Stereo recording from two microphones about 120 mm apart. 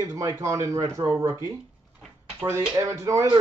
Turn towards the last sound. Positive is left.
turn(degrees=-25)  # may be behind; listen again after turning